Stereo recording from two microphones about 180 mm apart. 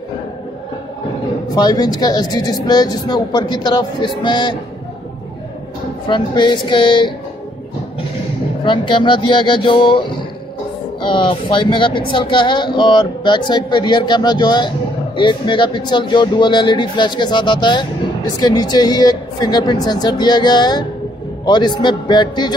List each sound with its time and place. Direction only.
1.5 s speech: 20° left (ahead or behind)
6.0 s speech: 25° left (ahead or behind)
8.6 s speech: 25° left (ahead or behind)